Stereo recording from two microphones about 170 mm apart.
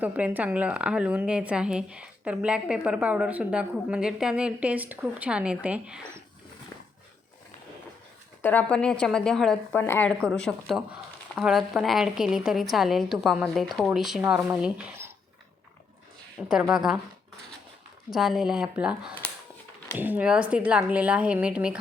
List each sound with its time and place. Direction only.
0.0 s a woman's voice: 10° right (ahead or behind)
6.7 s dog: 20° left (ahead or behind)
8.4 s a woman's voice: 10° left (ahead or behind); by 15.1 s 10° right (ahead or behind)
16.5 s a woman's voice: 5° right (ahead or behind)
18.1 s a woman's voice: centre (ahead or behind)